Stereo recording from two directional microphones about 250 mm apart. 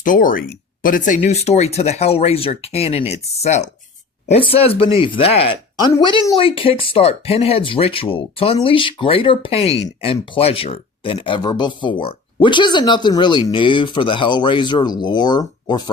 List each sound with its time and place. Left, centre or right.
0.0 s speech: left; by 15.8 s centre